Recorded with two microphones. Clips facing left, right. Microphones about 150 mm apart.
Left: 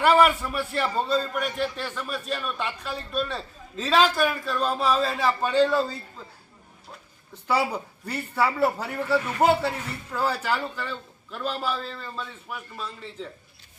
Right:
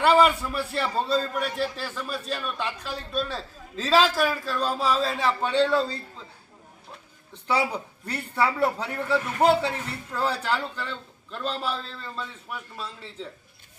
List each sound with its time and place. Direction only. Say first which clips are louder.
0.0 s a woman's voice: even; 5° left (ahead or behind)
7.4 s a woman's voice: left 1 dB; 5° left (ahead or behind)